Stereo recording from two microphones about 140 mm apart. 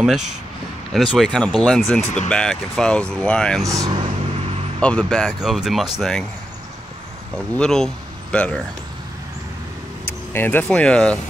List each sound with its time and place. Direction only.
0.0 s speech: 5° right (ahead or behind)
3.6 s speech: 25° right (ahead or behind)
4.7 s speech: 5° left (ahead or behind)
7.5 s speech: 5° left (ahead or behind)
10.0 s speech: 15° left (ahead or behind)